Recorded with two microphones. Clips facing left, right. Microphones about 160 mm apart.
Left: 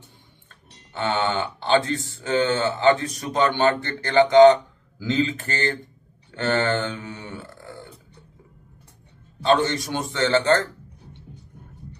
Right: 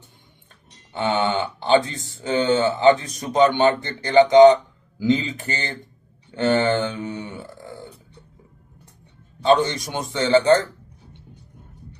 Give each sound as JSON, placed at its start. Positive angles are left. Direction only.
{"t": 0.9, "sound": "speech", "side_deg": -15}
{"t": 9.4, "sound": "speech", "side_deg": -20}